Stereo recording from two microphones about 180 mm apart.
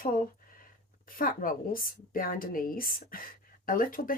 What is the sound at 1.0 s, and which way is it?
Speech, 50° left (ahead or behind).